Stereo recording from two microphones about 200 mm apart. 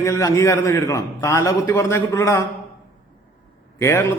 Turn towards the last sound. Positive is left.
turn(degrees=10)  # may be behind; listen again after turning